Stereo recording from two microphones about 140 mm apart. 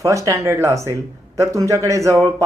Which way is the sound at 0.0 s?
20° right (ahead or behind).